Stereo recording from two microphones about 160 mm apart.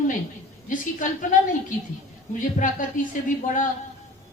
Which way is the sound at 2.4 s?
55° left (ahead or behind).